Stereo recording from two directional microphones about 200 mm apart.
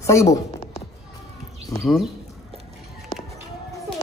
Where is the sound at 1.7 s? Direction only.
15° left (ahead or behind).